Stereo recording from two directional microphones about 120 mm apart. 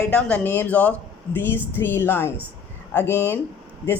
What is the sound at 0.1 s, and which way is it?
A woman's voice, 10° left (ahead or behind).